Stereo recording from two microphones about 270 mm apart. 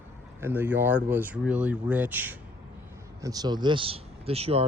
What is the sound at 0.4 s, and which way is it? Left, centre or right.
Speech, centre.